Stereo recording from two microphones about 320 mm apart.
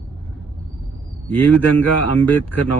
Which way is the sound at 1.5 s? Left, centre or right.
Centre.